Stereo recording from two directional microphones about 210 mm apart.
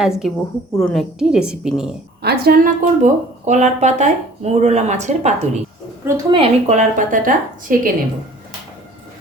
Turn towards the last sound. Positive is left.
turn(degrees=-40)  # may be behind; listen again after turning